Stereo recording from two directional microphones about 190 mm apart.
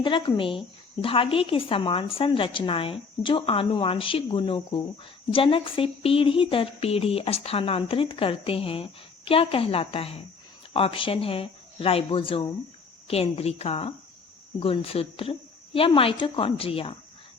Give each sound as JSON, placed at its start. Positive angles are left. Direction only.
{"t": 0.0, "sound": "a woman's voice", "side_deg": 25}